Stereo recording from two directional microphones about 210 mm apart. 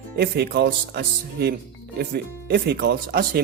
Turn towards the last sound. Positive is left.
turn(degrees=-45)  # may be behind; listen again after turning